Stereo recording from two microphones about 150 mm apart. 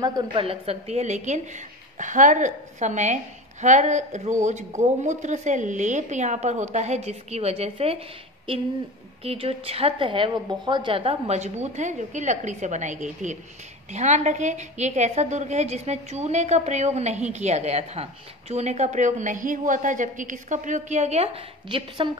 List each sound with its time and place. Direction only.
0.0 s a woman's voice: 30° right (ahead or behind)